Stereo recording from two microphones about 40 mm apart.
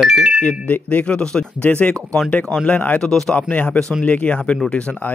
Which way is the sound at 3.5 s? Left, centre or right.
Left.